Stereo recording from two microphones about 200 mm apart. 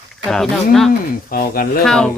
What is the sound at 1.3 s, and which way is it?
Speech, 45° left (ahead or behind).